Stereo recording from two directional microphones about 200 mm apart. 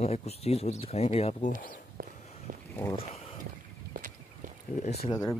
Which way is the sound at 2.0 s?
45° right (ahead or behind).